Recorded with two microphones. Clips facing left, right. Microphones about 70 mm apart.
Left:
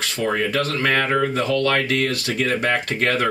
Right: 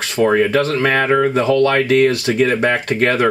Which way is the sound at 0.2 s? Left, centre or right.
Right.